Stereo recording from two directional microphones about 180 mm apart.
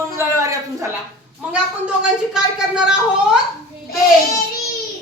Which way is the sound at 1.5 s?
5° right (ahead or behind).